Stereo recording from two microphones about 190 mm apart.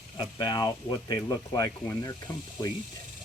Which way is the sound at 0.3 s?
20° left (ahead or behind).